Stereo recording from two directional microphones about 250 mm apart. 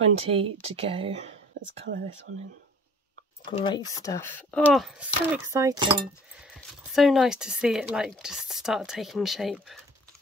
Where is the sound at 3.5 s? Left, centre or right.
Centre.